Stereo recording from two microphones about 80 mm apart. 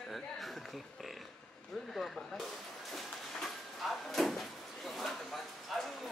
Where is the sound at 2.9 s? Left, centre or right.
Centre.